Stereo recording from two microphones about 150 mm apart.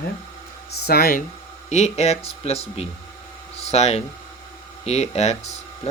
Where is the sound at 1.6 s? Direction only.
50° left (ahead or behind).